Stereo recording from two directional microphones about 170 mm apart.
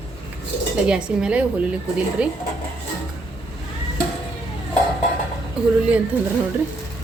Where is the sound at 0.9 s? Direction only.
5° right (ahead or behind).